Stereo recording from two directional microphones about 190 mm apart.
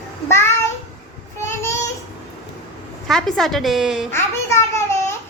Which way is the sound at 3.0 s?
Centre (ahead or behind).